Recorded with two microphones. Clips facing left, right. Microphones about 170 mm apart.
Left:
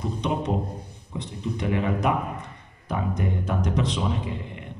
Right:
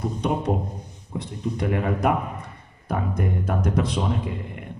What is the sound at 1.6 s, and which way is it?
Speech, 50° right (ahead or behind).